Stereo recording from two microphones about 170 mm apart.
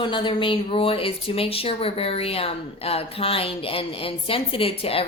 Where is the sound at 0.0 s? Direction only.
30° left (ahead or behind).